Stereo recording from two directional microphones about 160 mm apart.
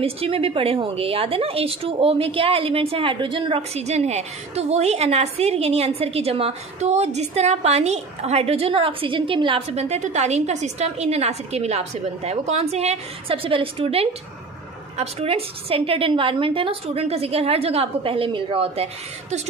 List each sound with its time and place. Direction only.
0.0 s a woman's voice: 35° right (ahead or behind)